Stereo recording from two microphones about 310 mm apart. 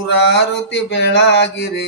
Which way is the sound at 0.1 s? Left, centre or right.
Left.